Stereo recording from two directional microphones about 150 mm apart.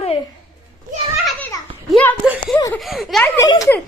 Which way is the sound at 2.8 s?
Centre (ahead or behind).